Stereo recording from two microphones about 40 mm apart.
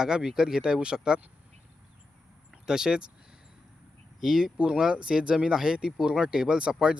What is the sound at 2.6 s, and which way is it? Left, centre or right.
Speech, centre.